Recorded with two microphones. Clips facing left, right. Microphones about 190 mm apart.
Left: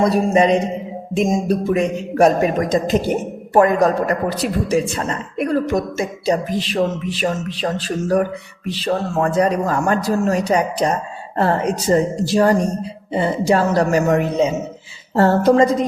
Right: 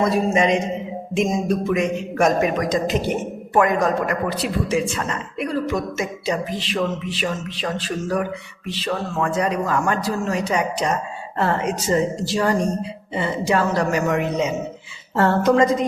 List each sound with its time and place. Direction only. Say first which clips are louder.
0.0 s music: left 4 dB; 35° left (ahead or behind)
5.5 s a woman's voice: left 5 dB; 50° left (ahead or behind)
6.0 s music: left 4 dB; 35° left (ahead or behind)